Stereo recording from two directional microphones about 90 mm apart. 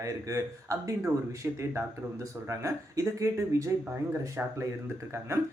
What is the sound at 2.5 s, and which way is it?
A man's voice, 35° right (ahead or behind).